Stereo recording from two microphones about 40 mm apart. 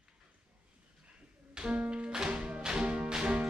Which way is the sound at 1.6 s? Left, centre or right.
Right.